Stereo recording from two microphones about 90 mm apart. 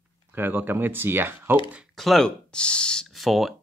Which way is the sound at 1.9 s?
Centre (ahead or behind).